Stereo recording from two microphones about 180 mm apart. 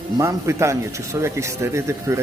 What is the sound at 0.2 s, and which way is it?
A man's voice, 15° right (ahead or behind).